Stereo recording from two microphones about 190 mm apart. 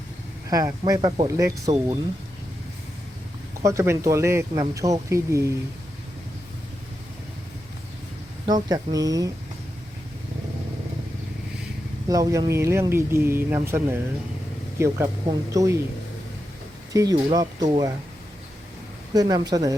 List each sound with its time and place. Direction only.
0.5 s speech: 20° right (ahead or behind)
3.6 s speech: 15° right (ahead or behind)
8.7 s speech: 20° right (ahead or behind)
12.0 s speech: 20° right (ahead or behind)
16.9 s speech: 20° right (ahead or behind)
19.1 s speech: 20° right (ahead or behind)